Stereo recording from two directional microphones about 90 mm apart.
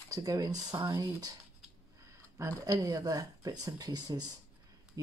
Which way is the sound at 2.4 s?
40° right (ahead or behind).